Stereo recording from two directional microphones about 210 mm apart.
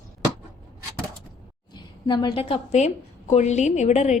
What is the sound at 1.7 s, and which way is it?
A woman's voice, 20° left (ahead or behind).